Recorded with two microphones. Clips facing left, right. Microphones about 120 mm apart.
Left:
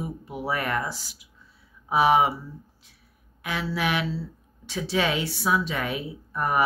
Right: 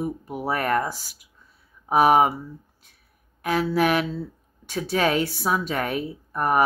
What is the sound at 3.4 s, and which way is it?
Speech, 45° right (ahead or behind).